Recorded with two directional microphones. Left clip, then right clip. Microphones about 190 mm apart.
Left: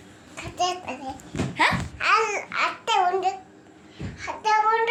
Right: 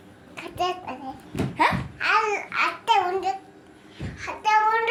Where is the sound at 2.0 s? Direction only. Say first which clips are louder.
Left 1 dB; 60° left (ahead or behind); by 3.3 s 45° left (ahead or behind).